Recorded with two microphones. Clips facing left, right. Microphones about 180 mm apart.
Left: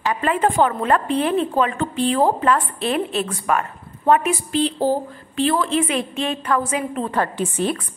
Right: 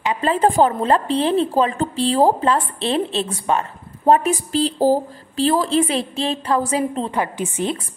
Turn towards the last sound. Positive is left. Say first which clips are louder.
# left 1 dB
turn(degrees=-20)  # may be behind; listen again after turning